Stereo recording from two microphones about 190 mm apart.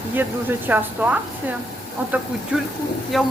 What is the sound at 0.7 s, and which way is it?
Speech, 10° right (ahead or behind).